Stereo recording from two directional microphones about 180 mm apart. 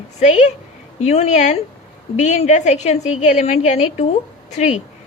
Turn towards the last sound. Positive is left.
turn(degrees=40)  # may be behind; listen again after turning